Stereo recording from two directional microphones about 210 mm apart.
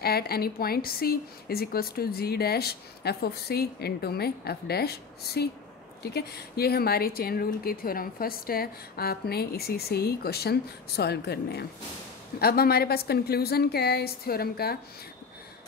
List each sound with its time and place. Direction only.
0.0 s speech: 50° left (ahead or behind)